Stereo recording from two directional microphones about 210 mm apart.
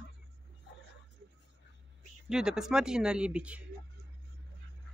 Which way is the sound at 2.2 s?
5° right (ahead or behind).